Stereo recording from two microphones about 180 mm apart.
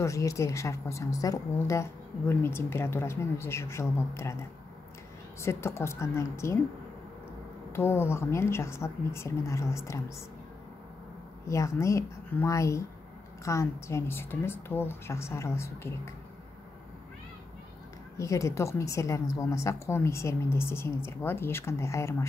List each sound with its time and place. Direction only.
0.0 s a woman's voice: 15° left (ahead or behind)
5.4 s a woman's voice: 15° left (ahead or behind)
7.7 s a woman's voice: 15° left (ahead or behind)
11.4 s a woman's voice: 15° left (ahead or behind)
18.1 s a woman's voice: 15° left (ahead or behind)